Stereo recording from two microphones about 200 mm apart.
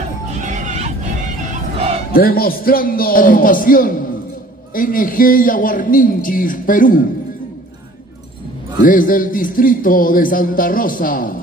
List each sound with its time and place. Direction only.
0.4 s neigh: 40° right (ahead or behind)
2.1 s a man's voice: 45° left (ahead or behind)
8.8 s a man's voice: 45° left (ahead or behind)